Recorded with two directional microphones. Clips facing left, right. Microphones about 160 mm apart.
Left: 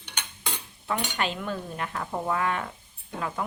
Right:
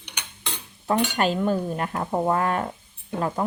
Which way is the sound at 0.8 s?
45° right (ahead or behind).